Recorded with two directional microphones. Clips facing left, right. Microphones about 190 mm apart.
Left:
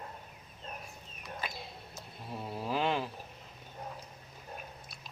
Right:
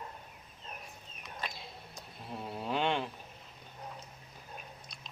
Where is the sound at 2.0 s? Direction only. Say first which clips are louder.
Even; centre (ahead or behind).